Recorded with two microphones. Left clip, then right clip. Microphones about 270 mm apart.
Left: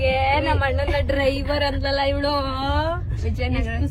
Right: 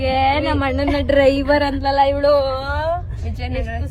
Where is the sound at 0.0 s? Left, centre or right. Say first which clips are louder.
Right 3 dB; right; by 2.5 s centre.